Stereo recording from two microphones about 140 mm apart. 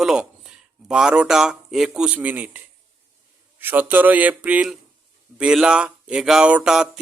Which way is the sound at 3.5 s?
15° right (ahead or behind).